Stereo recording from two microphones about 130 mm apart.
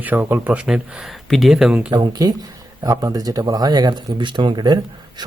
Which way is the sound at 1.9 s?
30° right (ahead or behind).